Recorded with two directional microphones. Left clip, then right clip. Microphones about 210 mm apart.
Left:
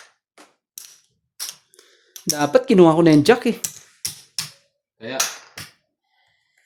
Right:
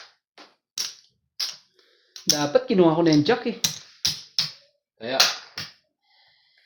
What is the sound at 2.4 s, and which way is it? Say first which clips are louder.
Speech: left 6 dB; 65° left (ahead or behind).